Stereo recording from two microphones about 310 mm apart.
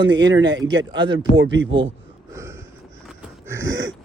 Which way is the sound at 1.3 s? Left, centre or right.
Right.